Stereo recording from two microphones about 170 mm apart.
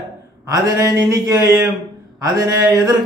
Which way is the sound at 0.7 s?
20° right (ahead or behind).